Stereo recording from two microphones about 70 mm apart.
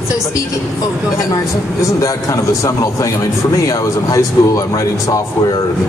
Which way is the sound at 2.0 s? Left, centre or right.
Left.